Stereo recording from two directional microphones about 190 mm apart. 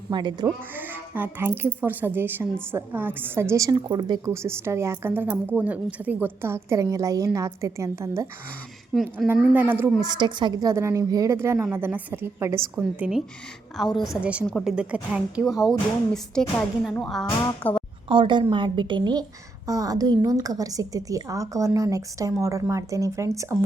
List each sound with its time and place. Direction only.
0.1 s a woman's voice: 25° right (ahead or behind)
0.7 s a woman's voice: 10° right (ahead or behind); by 4.2 s 25° right (ahead or behind)
4.3 s a woman's voice: 15° right (ahead or behind)
10.1 s a woman's voice: 25° right (ahead or behind); by 17.8 s 10° left (ahead or behind)
18.1 s a woman's voice: 25° right (ahead or behind)